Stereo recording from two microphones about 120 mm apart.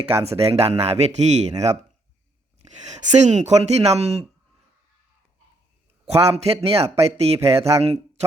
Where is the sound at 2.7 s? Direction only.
70° right (ahead or behind).